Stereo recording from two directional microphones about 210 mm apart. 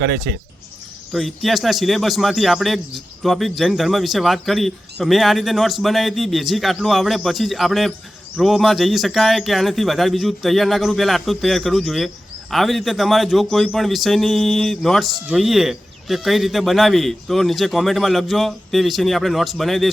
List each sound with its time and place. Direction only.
0.0 s speech: 55° right (ahead or behind)
1.1 s speech: centre (ahead or behind)